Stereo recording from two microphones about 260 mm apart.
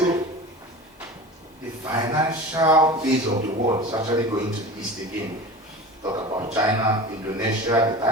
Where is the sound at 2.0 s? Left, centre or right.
Centre.